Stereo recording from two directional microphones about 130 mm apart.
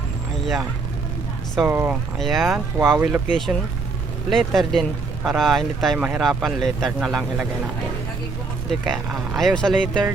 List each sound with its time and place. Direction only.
1.6 s speech: 15° right (ahead or behind)
2.1 s speech: centre (ahead or behind)
2.7 s speech: 15° right (ahead or behind)
3.2 s speech: centre (ahead or behind)
8.9 s speech: centre (ahead or behind)